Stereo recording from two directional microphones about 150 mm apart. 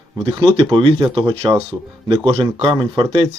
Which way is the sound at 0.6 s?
40° right (ahead or behind).